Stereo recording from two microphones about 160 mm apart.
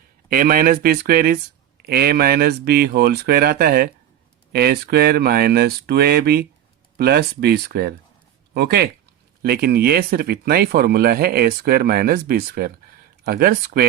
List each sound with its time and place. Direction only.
0.3 s speech: 65° right (ahead or behind)